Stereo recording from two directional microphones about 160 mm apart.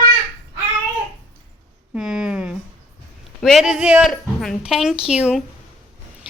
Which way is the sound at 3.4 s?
Centre (ahead or behind).